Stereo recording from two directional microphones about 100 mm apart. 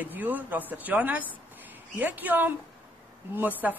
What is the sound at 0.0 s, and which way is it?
A man's voice, 15° right (ahead or behind).